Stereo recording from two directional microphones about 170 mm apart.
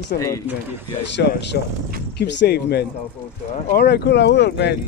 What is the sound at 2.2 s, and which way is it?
Speech, 75° left (ahead or behind).